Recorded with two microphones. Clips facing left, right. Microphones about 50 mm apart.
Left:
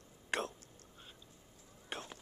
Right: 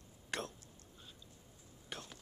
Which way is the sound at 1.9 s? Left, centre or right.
Left.